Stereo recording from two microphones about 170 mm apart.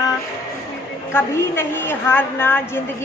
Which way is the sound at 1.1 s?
15° left (ahead or behind).